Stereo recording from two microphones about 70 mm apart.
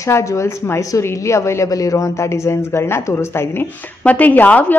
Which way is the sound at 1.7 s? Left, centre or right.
Left.